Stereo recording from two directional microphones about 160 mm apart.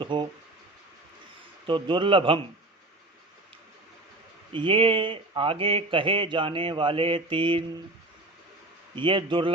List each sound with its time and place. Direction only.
0.0 s a sound: 30° right (ahead or behind)
1.6 s speech: 30° right (ahead or behind)
4.5 s speech: 30° right (ahead or behind)
9.0 s speech: 30° right (ahead or behind)